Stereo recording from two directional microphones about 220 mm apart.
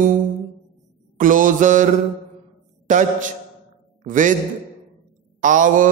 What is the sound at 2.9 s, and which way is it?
Mantra, 35° right (ahead or behind).